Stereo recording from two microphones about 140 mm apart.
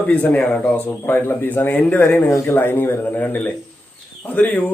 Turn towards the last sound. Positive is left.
turn(degrees=15)  # may be behind; listen again after turning